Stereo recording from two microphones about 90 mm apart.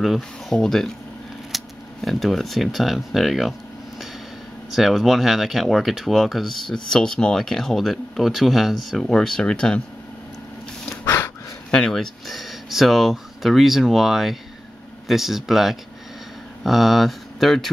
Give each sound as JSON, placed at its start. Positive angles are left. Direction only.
{"t": 0.0, "sound": "speech", "side_deg": 0}
{"t": 4.6, "sound": "speech", "side_deg": -5}
{"t": 11.1, "sound": "a sound", "side_deg": 25}
{"t": 11.7, "sound": "speech", "side_deg": 5}